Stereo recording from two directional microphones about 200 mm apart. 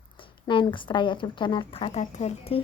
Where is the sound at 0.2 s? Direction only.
25° left (ahead or behind).